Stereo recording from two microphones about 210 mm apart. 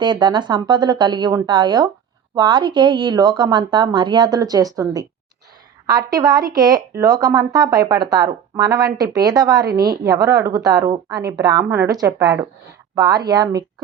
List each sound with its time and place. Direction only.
0.0 s speech: 20° right (ahead or behind)